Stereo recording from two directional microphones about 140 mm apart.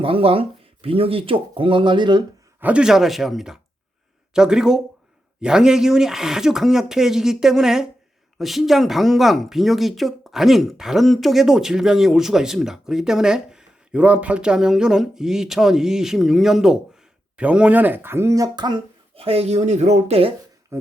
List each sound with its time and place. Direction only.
0.0 s speech: 40° right (ahead or behind)
2.6 s speech: 10° right (ahead or behind); by 19.2 s 30° right (ahead or behind)
19.2 s speech: 45° right (ahead or behind)